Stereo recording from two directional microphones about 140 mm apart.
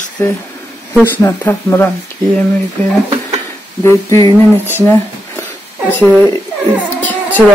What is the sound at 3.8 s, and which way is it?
Speech, 20° left (ahead or behind).